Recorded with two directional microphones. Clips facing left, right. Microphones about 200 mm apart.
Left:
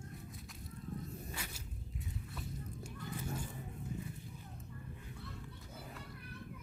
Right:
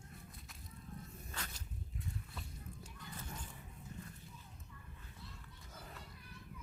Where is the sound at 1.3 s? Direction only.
10° left (ahead or behind).